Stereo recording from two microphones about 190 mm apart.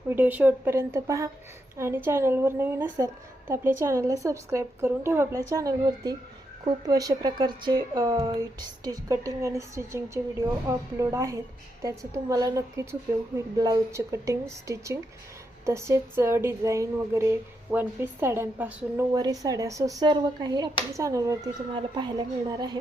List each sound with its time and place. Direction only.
0.1 s speech: 10° right (ahead or behind)